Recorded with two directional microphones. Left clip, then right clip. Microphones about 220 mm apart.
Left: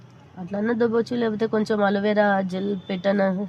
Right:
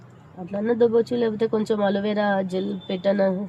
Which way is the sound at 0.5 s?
30° left (ahead or behind).